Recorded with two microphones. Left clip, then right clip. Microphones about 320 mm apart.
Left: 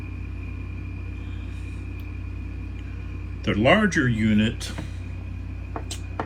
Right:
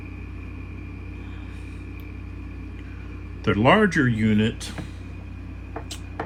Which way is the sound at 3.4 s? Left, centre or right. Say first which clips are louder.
Right 1 dB; centre.